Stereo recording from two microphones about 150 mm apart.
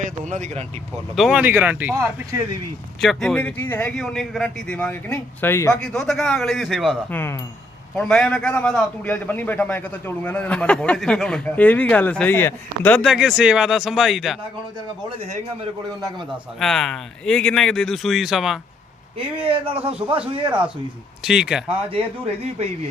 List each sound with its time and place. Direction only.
0.0 s speech: 55° right (ahead or behind)
1.1 s speech: centre (ahead or behind)
3.0 s speech: centre (ahead or behind)
5.8 s speech: centre (ahead or behind)
7.1 s speech: 15° left (ahead or behind)
7.9 s speech: 5° left (ahead or behind)
13.0 s speech: 5° right (ahead or behind)
16.0 s speech: centre (ahead or behind)
19.5 s speech: 40° right (ahead or behind)
21.2 s speech: 5° right (ahead or behind)